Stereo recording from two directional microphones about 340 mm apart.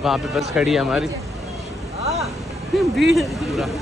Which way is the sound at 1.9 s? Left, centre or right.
Centre.